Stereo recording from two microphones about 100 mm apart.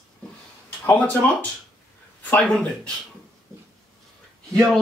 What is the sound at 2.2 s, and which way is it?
Speech, 10° left (ahead or behind).